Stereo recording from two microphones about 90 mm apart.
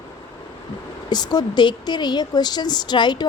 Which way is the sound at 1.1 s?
50° left (ahead or behind).